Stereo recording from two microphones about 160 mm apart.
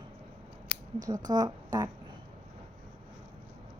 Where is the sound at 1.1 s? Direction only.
25° right (ahead or behind).